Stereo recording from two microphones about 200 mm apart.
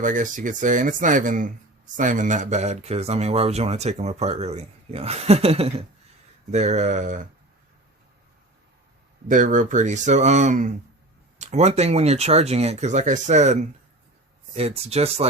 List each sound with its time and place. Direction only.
0.0 s speech: 40° right (ahead or behind)
9.2 s speech: 40° right (ahead or behind)